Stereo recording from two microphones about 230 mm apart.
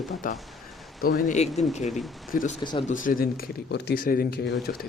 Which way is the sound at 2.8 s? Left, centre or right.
Left.